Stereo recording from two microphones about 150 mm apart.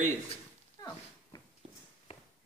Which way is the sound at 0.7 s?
25° left (ahead or behind).